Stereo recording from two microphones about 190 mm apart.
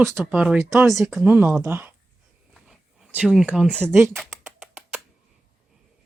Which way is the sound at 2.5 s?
5° right (ahead or behind).